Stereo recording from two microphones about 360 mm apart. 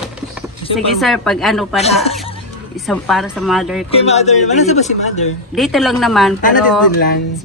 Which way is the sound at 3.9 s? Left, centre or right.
Centre.